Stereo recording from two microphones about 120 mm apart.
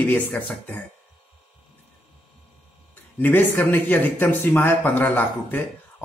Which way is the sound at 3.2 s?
20° left (ahead or behind).